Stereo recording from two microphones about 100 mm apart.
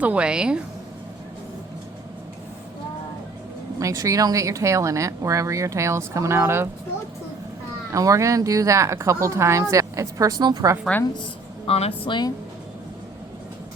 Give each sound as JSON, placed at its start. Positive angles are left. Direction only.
{"t": 0.0, "sound": "a woman's voice", "side_deg": -10}
{"t": 3.8, "sound": "speech", "side_deg": -35}
{"t": 7.9, "sound": "speech", "side_deg": -35}
{"t": 11.2, "sound": "speech", "side_deg": 75}
{"t": 12.0, "sound": "a woman's voice", "side_deg": 50}